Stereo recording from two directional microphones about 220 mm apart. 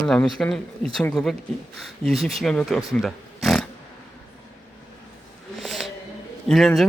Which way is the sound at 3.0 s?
Centre (ahead or behind).